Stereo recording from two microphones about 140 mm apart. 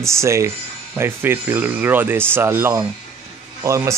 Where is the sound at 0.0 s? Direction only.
20° right (ahead or behind).